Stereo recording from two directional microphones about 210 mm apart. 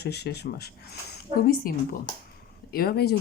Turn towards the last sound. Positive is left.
turn(degrees=50)  # may be behind; listen again after turning